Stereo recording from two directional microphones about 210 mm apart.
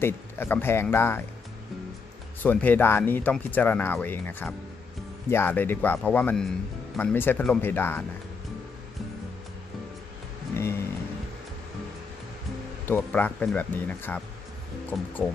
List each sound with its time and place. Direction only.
0.0 s speech: 10° left (ahead or behind)
2.4 s speech: 10° left (ahead or behind)
10.5 s music: 10° left (ahead or behind)
12.8 s speech: 10° left (ahead or behind)